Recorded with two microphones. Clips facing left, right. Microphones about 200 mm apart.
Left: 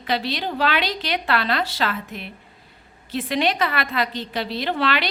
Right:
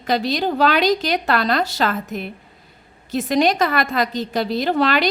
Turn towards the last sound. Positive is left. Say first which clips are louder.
# right 5 dB
turn(degrees=-45)  # may be behind; listen again after turning